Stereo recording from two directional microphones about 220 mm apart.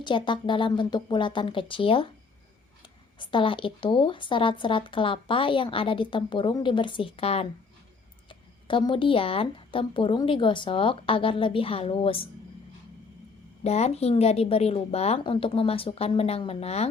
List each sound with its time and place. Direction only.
0.0 s speech: 20° left (ahead or behind)
13.7 s speech: 30° left (ahead or behind)